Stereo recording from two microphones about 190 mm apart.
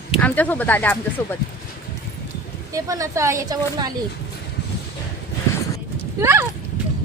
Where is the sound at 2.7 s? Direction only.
15° right (ahead or behind).